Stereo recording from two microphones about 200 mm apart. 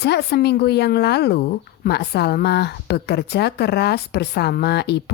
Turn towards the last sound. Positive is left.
turn(degrees=55)  # may be behind; listen again after turning